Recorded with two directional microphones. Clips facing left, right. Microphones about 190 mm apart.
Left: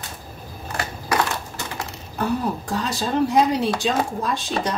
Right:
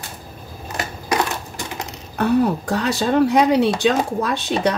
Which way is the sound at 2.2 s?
65° right (ahead or behind).